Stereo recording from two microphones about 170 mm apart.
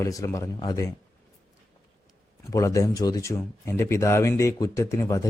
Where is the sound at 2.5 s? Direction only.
20° left (ahead or behind).